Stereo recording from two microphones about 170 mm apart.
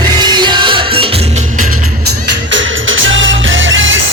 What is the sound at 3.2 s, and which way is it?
Music, 90° right.